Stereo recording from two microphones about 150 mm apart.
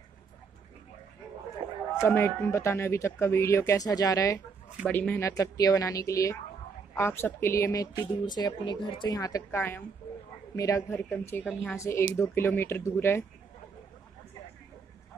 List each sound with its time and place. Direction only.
2.0 s speech: 15° left (ahead or behind)
4.8 s speech: 10° left (ahead or behind)